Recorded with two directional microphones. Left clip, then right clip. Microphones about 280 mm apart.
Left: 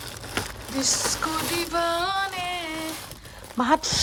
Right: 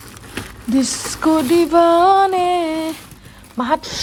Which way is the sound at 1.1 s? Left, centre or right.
Centre.